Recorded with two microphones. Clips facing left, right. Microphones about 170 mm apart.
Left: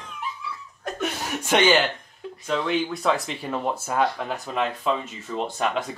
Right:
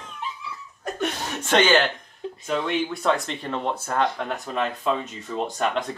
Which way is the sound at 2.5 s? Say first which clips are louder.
Left 1 dB; centre (ahead or behind).